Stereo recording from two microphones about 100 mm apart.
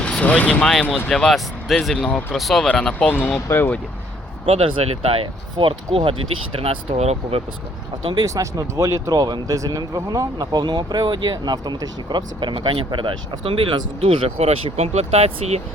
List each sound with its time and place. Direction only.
0.0 s speech: 10° left (ahead or behind)
0.7 s speech: centre (ahead or behind)
3.1 s speech: 20° left (ahead or behind)
4.4 s speech: 70° right (ahead or behind)
6.6 s speech: 85° right
8.2 s speech: 35° right (ahead or behind); by 15.6 s 90° right